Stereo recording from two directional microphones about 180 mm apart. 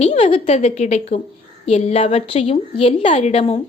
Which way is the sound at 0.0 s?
35° left (ahead or behind).